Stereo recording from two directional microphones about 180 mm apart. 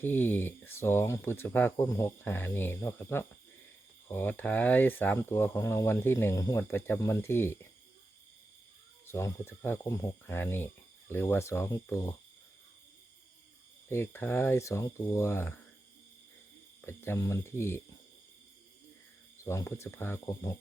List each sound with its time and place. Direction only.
0.0 s speech: 10° left (ahead or behind)
9.0 s speech: 15° left (ahead or behind)
13.9 s speech: 15° left (ahead or behind)
16.8 s speech: 15° left (ahead or behind)
19.5 s speech: 15° left (ahead or behind)